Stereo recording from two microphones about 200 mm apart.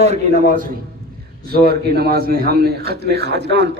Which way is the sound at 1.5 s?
50° right (ahead or behind).